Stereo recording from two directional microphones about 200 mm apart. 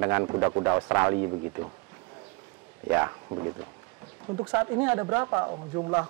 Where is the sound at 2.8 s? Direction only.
15° right (ahead or behind).